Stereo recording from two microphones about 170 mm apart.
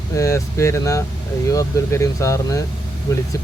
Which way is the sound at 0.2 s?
15° left (ahead or behind).